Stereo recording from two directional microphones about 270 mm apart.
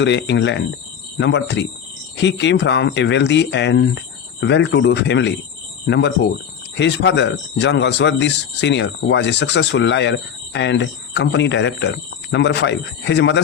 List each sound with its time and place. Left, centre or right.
0.0 s a man's voice: left